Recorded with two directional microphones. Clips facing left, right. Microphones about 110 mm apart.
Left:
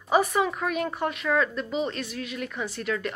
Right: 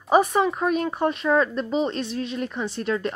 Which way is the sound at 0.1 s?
25° right (ahead or behind).